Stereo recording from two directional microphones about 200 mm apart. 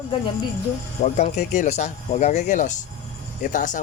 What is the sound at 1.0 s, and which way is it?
Speech, 35° left (ahead or behind).